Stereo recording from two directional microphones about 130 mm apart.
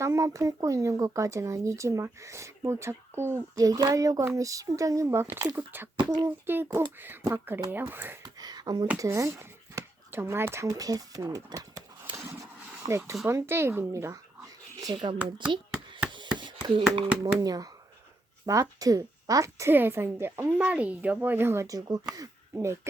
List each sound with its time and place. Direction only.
0.0 s a woman's voice: 20° right (ahead or behind)
6.0 s speech: 35° right (ahead or behind)
6.4 s speech: 15° right (ahead or behind)
8.2 s a sound: 30° right (ahead or behind)
9.0 s speech: 20° right (ahead or behind)
12.8 s speech: 45° right (ahead or behind)
13.2 s speech: 20° right (ahead or behind)
16.4 s hands: 35° right (ahead or behind)
17.4 s a woman's voice: 30° right (ahead or behind)